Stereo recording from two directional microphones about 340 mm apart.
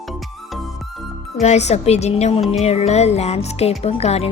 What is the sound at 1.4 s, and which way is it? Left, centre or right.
Speech, centre.